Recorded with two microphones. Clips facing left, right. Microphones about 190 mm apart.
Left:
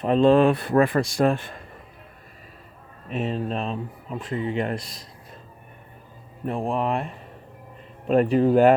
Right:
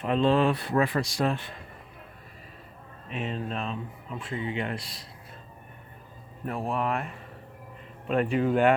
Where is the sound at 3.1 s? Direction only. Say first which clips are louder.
Left 6 dB; 40° left (ahead or behind).